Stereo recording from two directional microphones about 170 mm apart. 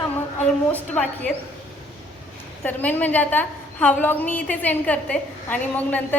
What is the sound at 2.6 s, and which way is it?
A woman's voice, 10° left (ahead or behind).